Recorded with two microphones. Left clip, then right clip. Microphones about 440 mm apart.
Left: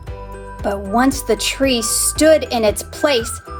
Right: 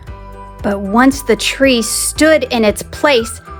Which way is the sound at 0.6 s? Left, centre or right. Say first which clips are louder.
Right 4 dB; centre.